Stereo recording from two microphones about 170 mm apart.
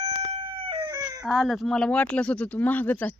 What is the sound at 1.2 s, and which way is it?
Speech, centre (ahead or behind).